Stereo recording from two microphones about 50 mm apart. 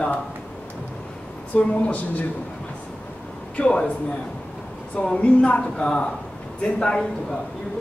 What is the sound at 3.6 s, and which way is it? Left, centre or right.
Speech, centre.